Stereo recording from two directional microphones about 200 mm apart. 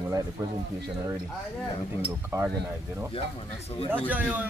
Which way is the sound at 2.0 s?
15° right (ahead or behind).